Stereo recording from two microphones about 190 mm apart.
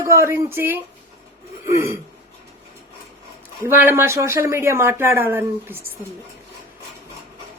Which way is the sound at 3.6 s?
10° right (ahead or behind).